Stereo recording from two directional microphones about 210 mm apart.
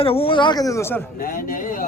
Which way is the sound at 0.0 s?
25° left (ahead or behind).